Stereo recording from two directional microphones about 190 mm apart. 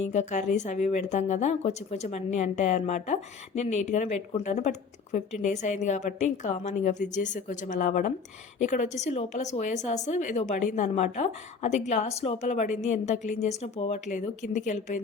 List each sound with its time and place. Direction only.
0.0 s a woman's voice: 40° left (ahead or behind)